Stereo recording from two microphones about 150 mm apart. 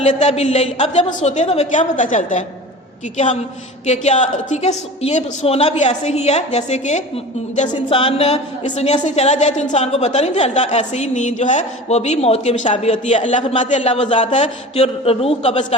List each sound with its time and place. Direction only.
0.0 s a woman's voice: 50° left (ahead or behind)
3.8 s a woman's voice: 50° left (ahead or behind)
7.9 s a man's voice: 40° left (ahead or behind)